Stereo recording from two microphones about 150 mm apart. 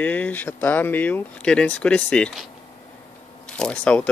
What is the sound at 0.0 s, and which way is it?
Speech, 10° left (ahead or behind).